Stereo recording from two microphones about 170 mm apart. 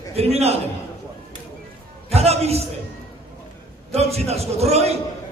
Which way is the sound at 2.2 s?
35° right (ahead or behind).